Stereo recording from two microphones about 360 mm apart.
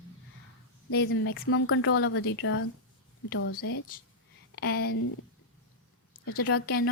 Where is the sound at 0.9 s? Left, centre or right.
Left.